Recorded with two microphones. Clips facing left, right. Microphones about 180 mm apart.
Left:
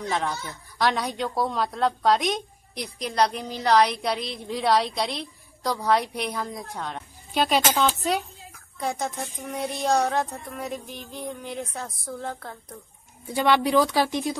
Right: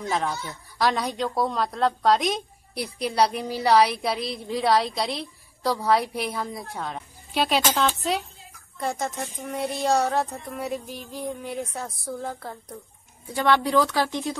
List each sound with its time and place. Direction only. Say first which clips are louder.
0.0 s speech: right 1 dB; centre (ahead or behind)
13.3 s speech: left 1 dB; 15° left (ahead or behind)